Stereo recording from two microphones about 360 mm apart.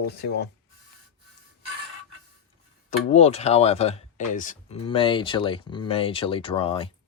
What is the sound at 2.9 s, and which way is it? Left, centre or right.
Speech, centre.